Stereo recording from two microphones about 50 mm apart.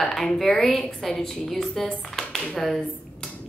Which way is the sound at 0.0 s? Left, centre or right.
Centre.